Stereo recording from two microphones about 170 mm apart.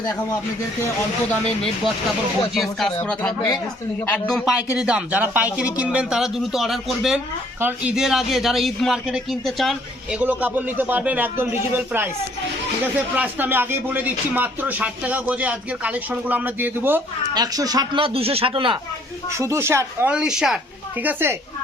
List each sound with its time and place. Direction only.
1.3 s a man's voice: 5° left (ahead or behind)
4.7 s a man's voice: 5° right (ahead or behind)
17.3 s speech: 20° right (ahead or behind)
19.3 s speech: 15° right (ahead or behind)